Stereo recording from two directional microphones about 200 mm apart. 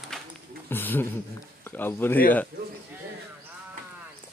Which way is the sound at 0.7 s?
10° left (ahead or behind).